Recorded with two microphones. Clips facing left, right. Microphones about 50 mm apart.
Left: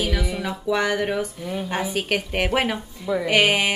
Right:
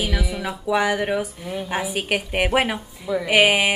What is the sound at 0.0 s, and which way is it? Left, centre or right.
A woman's voice, centre.